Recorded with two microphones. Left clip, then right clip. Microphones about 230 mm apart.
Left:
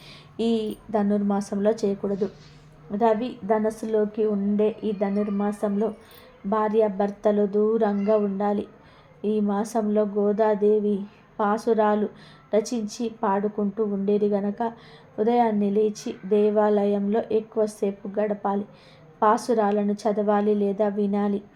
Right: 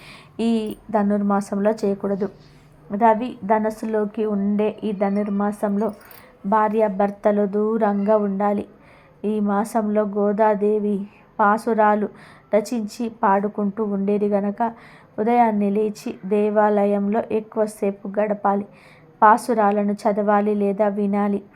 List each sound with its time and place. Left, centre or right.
0.1 s speech: right